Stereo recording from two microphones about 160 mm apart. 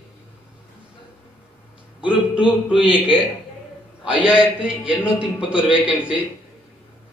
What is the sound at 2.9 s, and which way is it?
Speech, 5° right (ahead or behind).